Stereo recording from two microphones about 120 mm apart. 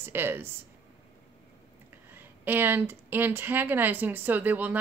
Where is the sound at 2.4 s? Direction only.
15° right (ahead or behind).